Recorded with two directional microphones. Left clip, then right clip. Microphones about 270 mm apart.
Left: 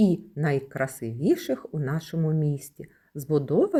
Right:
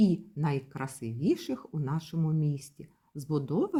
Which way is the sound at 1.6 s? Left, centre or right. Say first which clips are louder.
Left 5 dB; centre.